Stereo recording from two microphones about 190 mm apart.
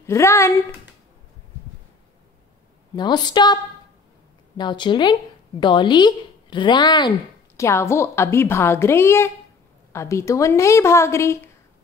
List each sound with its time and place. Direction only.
0.0 s speech: 15° left (ahead or behind)
3.0 s a woman's voice: 20° left (ahead or behind)
4.6 s a woman's voice: 25° left (ahead or behind)